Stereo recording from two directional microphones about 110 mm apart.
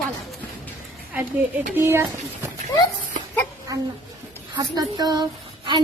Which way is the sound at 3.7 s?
30° right (ahead or behind).